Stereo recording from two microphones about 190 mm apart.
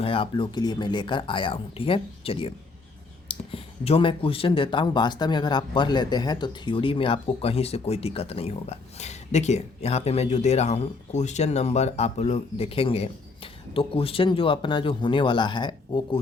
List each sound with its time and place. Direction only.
0.0 s speech: 30° left (ahead or behind)